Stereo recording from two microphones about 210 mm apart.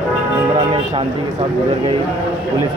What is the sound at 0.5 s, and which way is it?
Speech, 25° right (ahead or behind).